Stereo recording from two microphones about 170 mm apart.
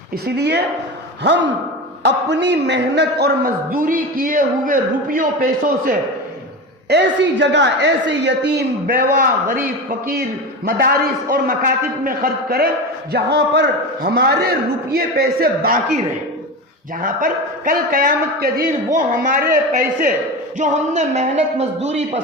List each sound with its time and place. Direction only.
0.3 s a man's voice: 75° right (ahead or behind)
1.2 s a woman's voice: 90° right; by 5.9 s 60° right (ahead or behind)
6.8 s a woman's voice: 85° right; by 9.6 s 55° right (ahead or behind)
10.7 s a man's voice: 60° right (ahead or behind)
13.1 s a man's voice: 80° right
14.9 s a man's voice: 60° right (ahead or behind)
20.6 s a man's voice: 45° right (ahead or behind)